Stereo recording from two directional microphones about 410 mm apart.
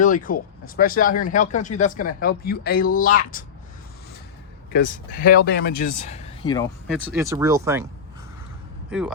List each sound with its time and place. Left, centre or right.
0.0 s speech: centre
4.7 s speech: left
7.0 s speech: centre
8.9 s speech: centre